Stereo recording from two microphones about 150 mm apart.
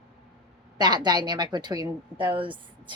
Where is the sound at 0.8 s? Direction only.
30° right (ahead or behind).